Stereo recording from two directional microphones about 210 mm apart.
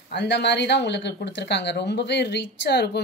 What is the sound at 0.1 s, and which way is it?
A woman's voice, 55° left (ahead or behind).